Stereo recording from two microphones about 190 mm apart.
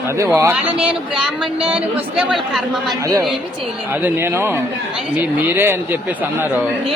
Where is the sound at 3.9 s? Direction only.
10° right (ahead or behind).